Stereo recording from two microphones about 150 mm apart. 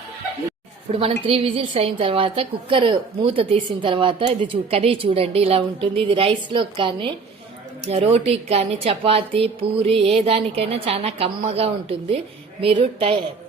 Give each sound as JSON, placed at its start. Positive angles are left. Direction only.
{"t": 0.9, "sound": "a woman's voice", "side_deg": -40}